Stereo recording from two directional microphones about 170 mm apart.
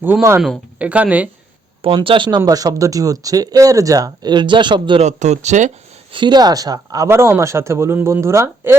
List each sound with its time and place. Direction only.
0.0 s speech: 15° right (ahead or behind)
1.8 s speech: 30° right (ahead or behind)
5.0 s speech: 40° right (ahead or behind)
6.1 s speech: 25° right (ahead or behind)